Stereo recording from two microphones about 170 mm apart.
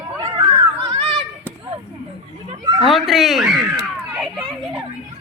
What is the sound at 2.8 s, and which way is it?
Speech, centre (ahead or behind).